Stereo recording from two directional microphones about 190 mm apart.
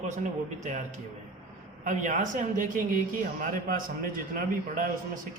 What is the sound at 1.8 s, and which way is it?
Speech, 40° right (ahead or behind).